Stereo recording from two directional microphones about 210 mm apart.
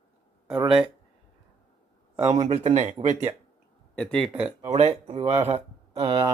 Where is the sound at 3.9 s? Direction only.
5° left (ahead or behind).